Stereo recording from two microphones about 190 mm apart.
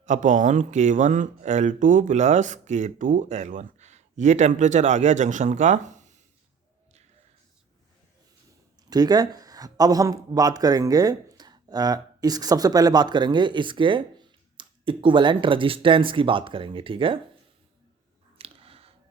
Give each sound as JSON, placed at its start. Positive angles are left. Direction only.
{"t": 0.0, "sound": "speech", "side_deg": -40}
{"t": 8.9, "sound": "speech", "side_deg": -20}
{"t": 18.3, "sound": "a sound", "side_deg": -30}